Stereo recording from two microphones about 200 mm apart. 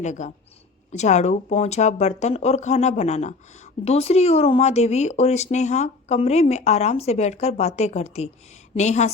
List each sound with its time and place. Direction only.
0.0 s speech: 35° left (ahead or behind)